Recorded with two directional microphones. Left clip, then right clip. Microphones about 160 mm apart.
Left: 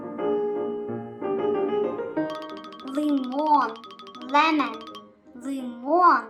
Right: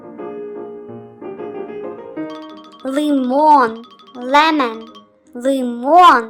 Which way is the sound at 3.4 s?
40° right (ahead or behind).